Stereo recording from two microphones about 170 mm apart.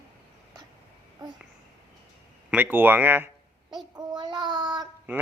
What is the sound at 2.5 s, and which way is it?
Speech, 10° right (ahead or behind).